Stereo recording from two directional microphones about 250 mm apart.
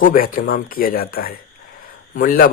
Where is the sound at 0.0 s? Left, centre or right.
Left.